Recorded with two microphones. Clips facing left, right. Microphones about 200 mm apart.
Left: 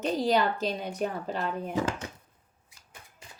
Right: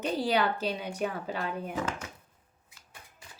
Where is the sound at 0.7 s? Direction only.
40° left (ahead or behind).